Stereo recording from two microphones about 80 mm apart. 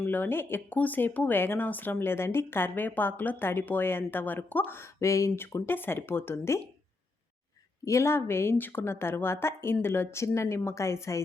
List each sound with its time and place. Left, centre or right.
0.1 s speech: left
7.9 s a woman's voice: left